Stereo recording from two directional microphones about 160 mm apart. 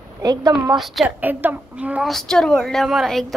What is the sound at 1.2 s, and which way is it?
A woman's voice, 10° right (ahead or behind).